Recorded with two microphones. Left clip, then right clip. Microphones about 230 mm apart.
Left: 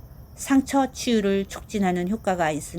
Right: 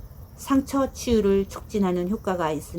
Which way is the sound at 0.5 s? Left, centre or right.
Centre.